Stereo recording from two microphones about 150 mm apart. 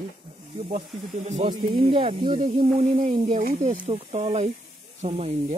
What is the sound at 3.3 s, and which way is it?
Speech, 55° right (ahead or behind).